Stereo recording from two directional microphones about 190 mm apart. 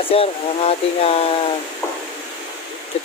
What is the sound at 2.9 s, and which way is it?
Stream, 30° left (ahead or behind).